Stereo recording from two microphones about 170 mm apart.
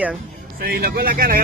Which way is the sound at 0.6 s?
65° right (ahead or behind).